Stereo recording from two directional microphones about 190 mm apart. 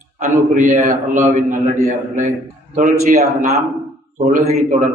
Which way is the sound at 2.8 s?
35° right (ahead or behind).